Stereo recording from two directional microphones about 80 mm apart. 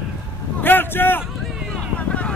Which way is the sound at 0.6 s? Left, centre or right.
Left.